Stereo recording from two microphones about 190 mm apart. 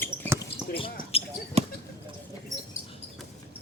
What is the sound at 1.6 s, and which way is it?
Basketball bounce, 30° right (ahead or behind).